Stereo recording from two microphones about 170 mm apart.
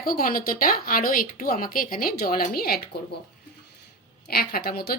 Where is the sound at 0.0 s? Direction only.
60° left (ahead or behind).